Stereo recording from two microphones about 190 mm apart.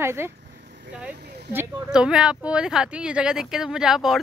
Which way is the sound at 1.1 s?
60° right (ahead or behind).